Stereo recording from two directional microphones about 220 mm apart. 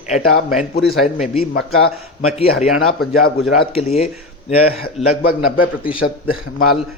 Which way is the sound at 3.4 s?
25° left (ahead or behind).